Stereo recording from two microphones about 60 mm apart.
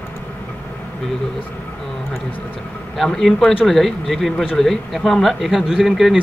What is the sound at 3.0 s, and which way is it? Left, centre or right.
Speech, centre.